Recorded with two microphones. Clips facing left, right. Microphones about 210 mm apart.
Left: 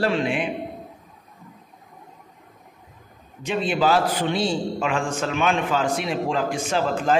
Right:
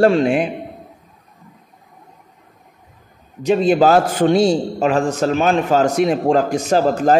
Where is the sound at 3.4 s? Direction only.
40° right (ahead or behind).